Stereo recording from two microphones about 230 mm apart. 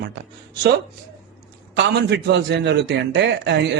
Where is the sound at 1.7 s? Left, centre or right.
Right.